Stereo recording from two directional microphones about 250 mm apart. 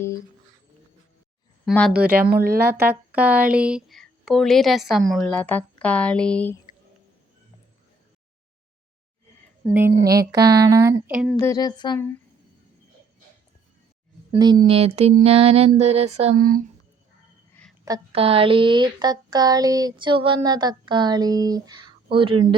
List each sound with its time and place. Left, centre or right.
1.6 s speech: centre
2.3 s speech: right
2.6 s speech: centre
9.6 s speech: centre
11.3 s speech: centre
14.3 s speech: centre
14.7 s mantra: right
17.5 s a sound: centre
17.8 s speech: centre